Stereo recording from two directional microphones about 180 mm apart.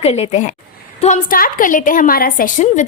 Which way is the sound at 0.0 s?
35° left (ahead or behind).